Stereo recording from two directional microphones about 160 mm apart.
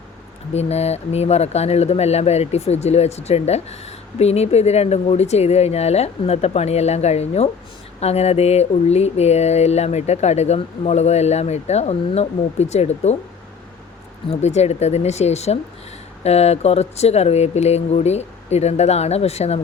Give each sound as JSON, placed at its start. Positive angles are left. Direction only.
{"t": 0.5, "sound": "speech", "side_deg": 40}
{"t": 14.3, "sound": "speech", "side_deg": 45}